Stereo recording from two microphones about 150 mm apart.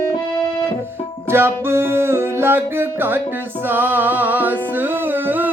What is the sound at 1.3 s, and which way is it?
Music, 15° right (ahead or behind).